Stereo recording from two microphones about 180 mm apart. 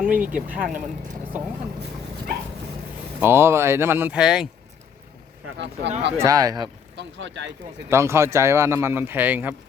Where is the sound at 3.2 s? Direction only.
10° right (ahead or behind).